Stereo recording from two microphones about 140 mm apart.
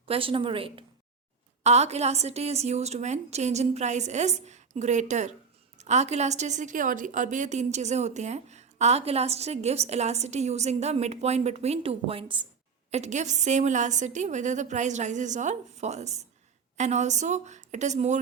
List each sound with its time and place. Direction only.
0.0 s a woman's voice: 40° right (ahead or behind)
1.6 s a woman's voice: 50° right (ahead or behind)
12.9 s a woman's voice: 55° right (ahead or behind)